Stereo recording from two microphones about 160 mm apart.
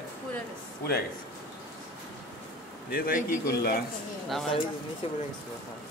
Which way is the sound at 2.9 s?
65° left (ahead or behind).